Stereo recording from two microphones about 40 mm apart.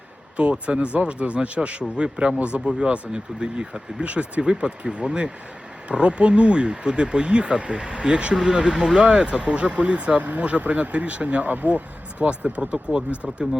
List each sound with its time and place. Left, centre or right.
0.6 s speech: right
4.0 s speech: right
8.4 s speech: centre; by 11.8 s right
12.3 s speech: right
13.2 s speech: centre